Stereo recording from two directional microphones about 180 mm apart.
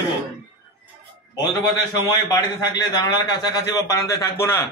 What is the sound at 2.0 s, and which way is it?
A man's voice, 25° left (ahead or behind).